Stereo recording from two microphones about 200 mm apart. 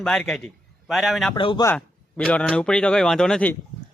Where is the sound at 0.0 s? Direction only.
5° left (ahead or behind).